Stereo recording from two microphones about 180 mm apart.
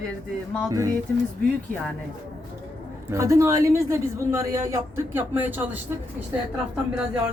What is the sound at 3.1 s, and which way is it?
A woman's voice, 15° right (ahead or behind).